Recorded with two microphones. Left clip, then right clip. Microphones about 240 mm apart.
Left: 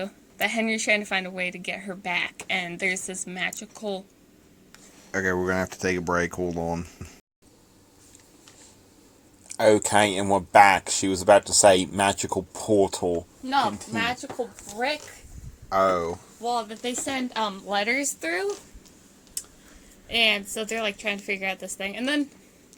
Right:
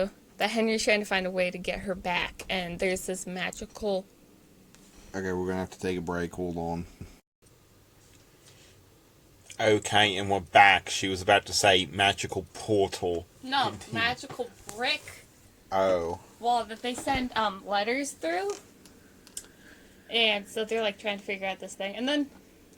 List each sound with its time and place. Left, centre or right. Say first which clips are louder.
0.0 s a woman's voice: left 1 dB; right
5.1 s speech: left 7 dB; centre
9.6 s speech: left 4 dB; left
15.7 s speech: left 3 dB; centre
16.4 s speech: right 1 dB; left
20.1 s a woman's voice: left 3 dB; left